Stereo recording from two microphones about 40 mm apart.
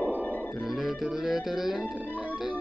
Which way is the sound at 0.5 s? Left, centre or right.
Centre.